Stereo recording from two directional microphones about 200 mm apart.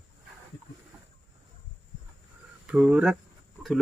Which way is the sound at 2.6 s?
5° right (ahead or behind).